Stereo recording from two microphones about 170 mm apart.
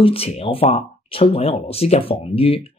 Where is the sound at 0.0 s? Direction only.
35° left (ahead or behind).